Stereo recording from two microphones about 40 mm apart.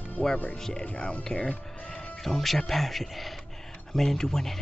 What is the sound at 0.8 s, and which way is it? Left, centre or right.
Speech, left.